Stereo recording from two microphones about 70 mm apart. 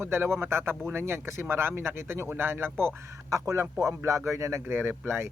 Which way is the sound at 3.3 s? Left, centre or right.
Right.